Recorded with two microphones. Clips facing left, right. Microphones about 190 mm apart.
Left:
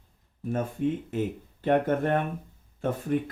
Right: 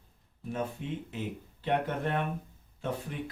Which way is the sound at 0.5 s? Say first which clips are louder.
Left 7 dB; 50° left (ahead or behind).